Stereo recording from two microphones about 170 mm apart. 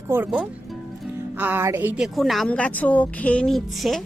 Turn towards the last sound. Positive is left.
turn(degrees=0)  # may be behind; listen again after turning